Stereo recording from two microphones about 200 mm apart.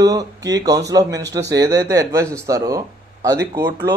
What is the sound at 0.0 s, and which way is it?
Speech, 20° right (ahead or behind).